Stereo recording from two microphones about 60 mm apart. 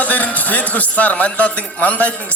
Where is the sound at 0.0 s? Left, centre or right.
Left.